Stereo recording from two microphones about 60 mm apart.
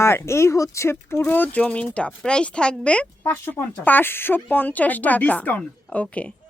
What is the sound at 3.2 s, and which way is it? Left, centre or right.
A woman's voice, left.